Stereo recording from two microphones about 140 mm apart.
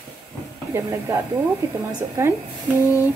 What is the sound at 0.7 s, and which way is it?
Speech, 20° right (ahead or behind).